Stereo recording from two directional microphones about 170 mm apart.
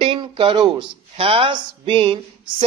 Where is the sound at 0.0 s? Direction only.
30° right (ahead or behind).